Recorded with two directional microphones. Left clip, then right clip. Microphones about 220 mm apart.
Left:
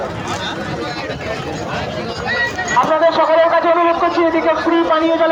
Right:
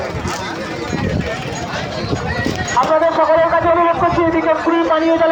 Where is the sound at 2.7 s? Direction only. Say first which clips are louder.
Even; 55° left (ahead or behind).